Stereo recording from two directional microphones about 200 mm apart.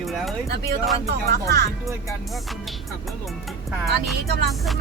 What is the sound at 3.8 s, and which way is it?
Speech, centre (ahead or behind).